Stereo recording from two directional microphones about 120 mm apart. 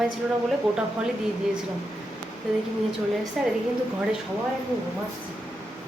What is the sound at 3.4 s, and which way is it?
Speech, 5° right (ahead or behind).